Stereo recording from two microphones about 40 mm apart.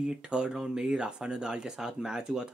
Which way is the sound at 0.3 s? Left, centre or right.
Centre.